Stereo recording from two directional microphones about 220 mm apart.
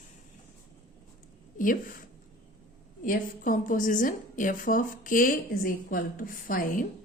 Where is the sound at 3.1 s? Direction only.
35° left (ahead or behind).